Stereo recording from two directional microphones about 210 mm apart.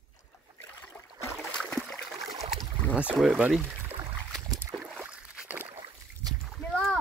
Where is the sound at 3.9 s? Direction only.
20° right (ahead or behind).